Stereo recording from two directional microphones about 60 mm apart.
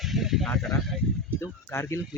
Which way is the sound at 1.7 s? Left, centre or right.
Left.